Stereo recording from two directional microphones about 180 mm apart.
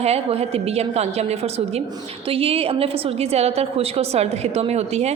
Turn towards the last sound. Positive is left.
turn(degrees=-35)  # may be behind; listen again after turning